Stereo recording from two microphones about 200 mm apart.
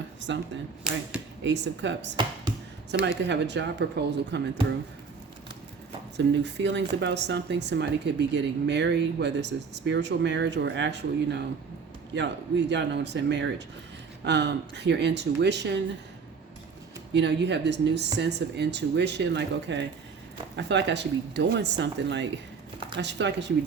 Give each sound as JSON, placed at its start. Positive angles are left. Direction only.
{"t": 0.3, "sound": "speech", "side_deg": -65}
{"t": 0.9, "sound": "speech", "side_deg": 0}
{"t": 1.5, "sound": "speech", "side_deg": -65}
{"t": 6.1, "sound": "speech", "side_deg": -60}
{"t": 17.2, "sound": "speech", "side_deg": -60}